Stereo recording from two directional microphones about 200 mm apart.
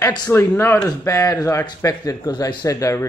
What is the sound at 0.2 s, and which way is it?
Speech, 10° left (ahead or behind).